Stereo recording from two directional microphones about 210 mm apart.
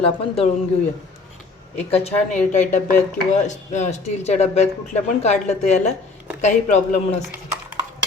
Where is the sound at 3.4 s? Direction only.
35° left (ahead or behind).